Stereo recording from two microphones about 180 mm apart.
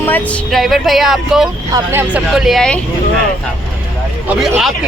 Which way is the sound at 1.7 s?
15° right (ahead or behind).